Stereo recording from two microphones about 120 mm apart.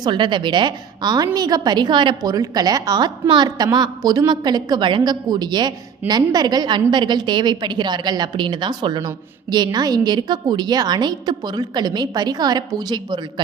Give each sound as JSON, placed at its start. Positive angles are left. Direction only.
{"t": 0.0, "sound": "a woman's voice", "side_deg": -40}